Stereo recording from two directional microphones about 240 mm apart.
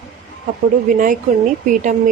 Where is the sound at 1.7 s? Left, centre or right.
Right.